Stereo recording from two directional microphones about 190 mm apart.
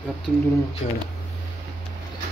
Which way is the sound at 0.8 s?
40° left (ahead or behind).